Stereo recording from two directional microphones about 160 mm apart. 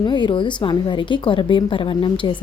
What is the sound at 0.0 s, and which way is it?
A woman's voice, 30° left (ahead or behind).